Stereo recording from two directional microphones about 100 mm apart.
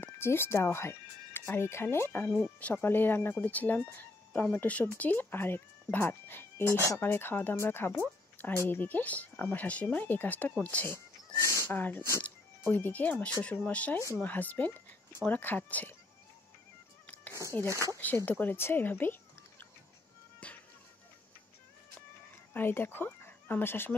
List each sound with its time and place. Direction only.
0.0 s speech: 25° left (ahead or behind)
11.4 s speech: 25° left (ahead or behind)
17.0 s cat: 15° left (ahead or behind)
17.6 s speech: 30° right (ahead or behind)
18.0 s speech: 20° left (ahead or behind)
20.4 s music: 15° left (ahead or behind)
22.5 s speech: 20° left (ahead or behind)